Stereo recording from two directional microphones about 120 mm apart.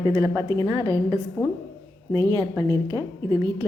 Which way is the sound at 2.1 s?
35° right (ahead or behind).